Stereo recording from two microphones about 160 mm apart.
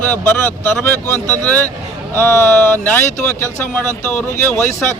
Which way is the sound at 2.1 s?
15° left (ahead or behind).